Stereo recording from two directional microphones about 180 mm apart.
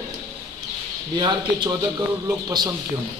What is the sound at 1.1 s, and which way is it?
Speech, 25° right (ahead or behind).